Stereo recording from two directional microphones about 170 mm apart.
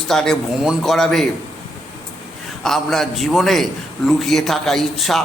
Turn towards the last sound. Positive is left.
turn(degrees=0)  # may be behind; listen again after turning